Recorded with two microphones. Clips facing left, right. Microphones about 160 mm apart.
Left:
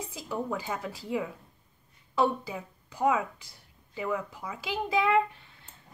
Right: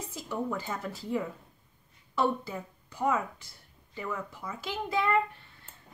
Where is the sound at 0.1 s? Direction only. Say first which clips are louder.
Right 1 dB; 10° left (ahead or behind).